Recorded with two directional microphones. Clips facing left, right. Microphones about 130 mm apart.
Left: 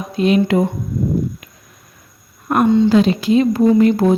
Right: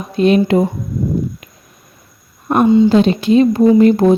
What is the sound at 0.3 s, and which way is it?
Speech, 35° right (ahead or behind).